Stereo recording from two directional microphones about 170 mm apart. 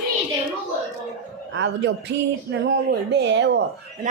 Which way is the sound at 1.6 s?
90° right.